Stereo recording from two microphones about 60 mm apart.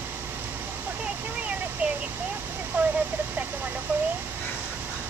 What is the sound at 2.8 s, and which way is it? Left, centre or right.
Speech, right.